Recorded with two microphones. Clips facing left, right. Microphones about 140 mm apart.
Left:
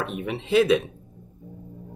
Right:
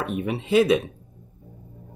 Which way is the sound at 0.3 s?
45° right (ahead or behind).